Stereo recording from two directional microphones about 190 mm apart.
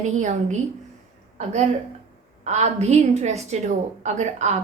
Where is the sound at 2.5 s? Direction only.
35° right (ahead or behind).